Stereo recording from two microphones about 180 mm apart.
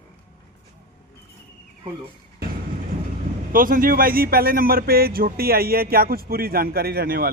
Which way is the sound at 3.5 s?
50° right (ahead or behind).